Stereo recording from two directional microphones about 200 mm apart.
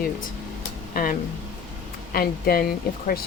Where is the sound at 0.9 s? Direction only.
45° left (ahead or behind).